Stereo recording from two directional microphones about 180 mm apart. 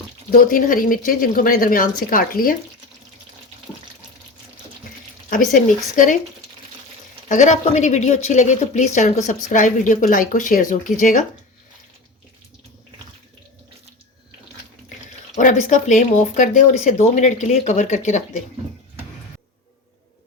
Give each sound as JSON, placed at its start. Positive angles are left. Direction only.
{"t": 0.3, "sound": "speech", "side_deg": 50}
{"t": 5.3, "sound": "speech", "side_deg": 50}
{"t": 7.3, "sound": "speech", "side_deg": 45}
{"t": 15.4, "sound": "speech", "side_deg": 40}